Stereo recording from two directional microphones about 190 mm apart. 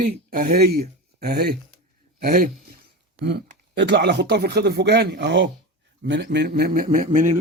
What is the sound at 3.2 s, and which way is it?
Speech, 65° right (ahead or behind).